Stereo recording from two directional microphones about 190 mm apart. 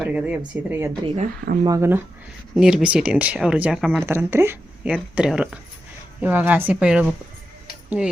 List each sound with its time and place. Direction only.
0.0 s speech: 5° right (ahead or behind)
1.0 s speech: 35° right (ahead or behind)
1.6 s speech: 15° right (ahead or behind)
2.6 s speech: 5° right (ahead or behind)
4.0 s speech: 15° right (ahead or behind)